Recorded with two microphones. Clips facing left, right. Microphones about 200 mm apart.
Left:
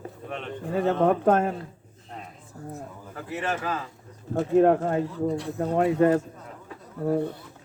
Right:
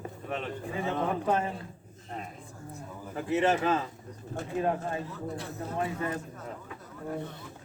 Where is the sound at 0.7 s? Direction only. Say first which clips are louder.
Left 9 dB; 65° left (ahead or behind).